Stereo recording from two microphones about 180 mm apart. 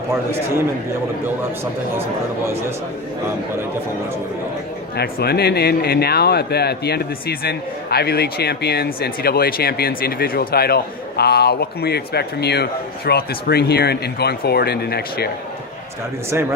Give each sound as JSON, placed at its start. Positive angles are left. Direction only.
{"t": 4.9, "sound": "speech", "side_deg": 60}